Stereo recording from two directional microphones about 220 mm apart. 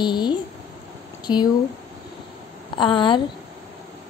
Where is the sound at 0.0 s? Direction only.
20° left (ahead or behind).